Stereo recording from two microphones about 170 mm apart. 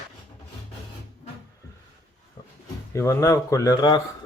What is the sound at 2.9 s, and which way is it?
Speech, 15° left (ahead or behind).